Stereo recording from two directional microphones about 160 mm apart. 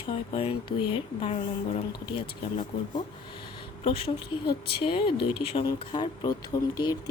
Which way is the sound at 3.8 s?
30° left (ahead or behind).